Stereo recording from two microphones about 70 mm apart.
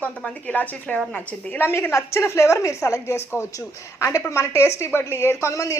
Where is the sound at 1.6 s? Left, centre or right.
Left.